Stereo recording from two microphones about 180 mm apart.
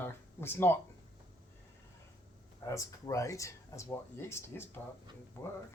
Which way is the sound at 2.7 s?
15° left (ahead or behind).